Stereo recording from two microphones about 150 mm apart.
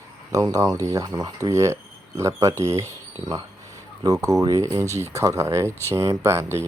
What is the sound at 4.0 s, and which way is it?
Speech, 25° right (ahead or behind).